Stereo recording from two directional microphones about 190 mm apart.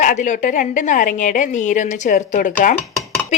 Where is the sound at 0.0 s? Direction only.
40° left (ahead or behind).